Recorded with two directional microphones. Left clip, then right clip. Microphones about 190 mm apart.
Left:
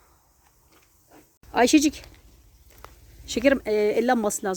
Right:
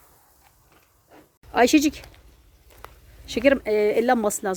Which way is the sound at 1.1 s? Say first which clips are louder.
Right 1 dB; 10° left (ahead or behind).